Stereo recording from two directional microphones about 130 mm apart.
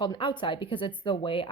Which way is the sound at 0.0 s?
40° left (ahead or behind).